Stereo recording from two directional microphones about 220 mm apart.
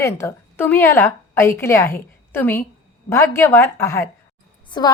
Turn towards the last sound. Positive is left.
turn(degrees=20)  # may be behind; listen again after turning